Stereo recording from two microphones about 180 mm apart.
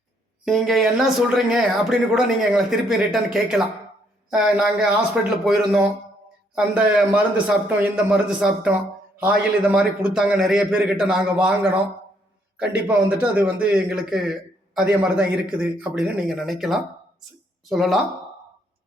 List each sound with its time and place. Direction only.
0.4 s speech: centre (ahead or behind)
4.3 s speech: 5° right (ahead or behind)
6.6 s a man's voice: 5° right (ahead or behind)